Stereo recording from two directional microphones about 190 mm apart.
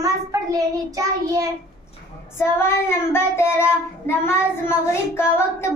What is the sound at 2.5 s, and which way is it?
Child singing, 15° left (ahead or behind).